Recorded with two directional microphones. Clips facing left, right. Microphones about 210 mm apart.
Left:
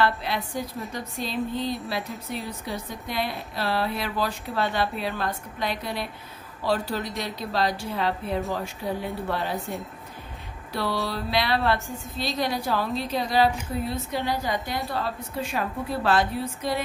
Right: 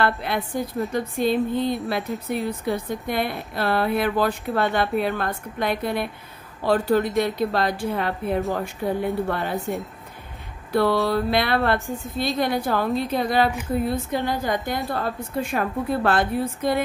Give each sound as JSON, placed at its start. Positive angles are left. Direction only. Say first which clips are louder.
{"t": 0.0, "sound": "speech", "louder": "right 2 dB", "side_deg": -55}
{"t": 10.7, "sound": "a woman's voice", "louder": "right 8 dB", "side_deg": -55}